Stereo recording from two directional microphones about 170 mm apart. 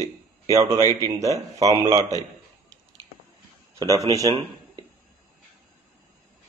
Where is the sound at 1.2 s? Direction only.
20° right (ahead or behind).